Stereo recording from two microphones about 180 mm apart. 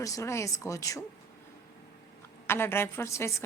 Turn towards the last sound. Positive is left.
turn(degrees=15)  # may be behind; listen again after turning